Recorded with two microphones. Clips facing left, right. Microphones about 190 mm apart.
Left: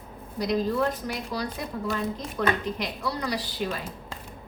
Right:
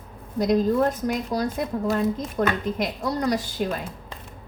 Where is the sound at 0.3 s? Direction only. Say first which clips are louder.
Right 5 dB; 45° right (ahead or behind).